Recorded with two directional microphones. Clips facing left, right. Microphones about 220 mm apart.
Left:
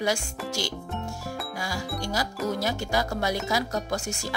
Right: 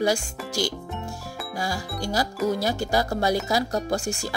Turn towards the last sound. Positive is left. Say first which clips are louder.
# right 4 dB
turn(degrees=-30)  # may be behind; listen again after turning